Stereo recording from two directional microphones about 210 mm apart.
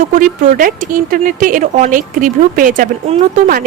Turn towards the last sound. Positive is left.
turn(degrees=-40)  # may be behind; listen again after turning